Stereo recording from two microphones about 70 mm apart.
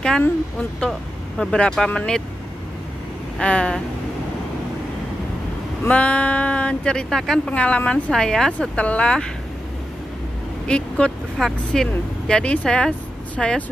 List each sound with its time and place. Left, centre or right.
0.8 s speech: centre
3.3 s speech: centre
5.9 s speech: centre
7.5 s speech: centre
10.7 s speech: centre